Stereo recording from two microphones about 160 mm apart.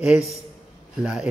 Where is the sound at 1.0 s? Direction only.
5° right (ahead or behind).